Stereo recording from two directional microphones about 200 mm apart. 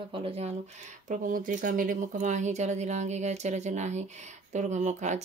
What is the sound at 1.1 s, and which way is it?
Speech, 40° right (ahead or behind).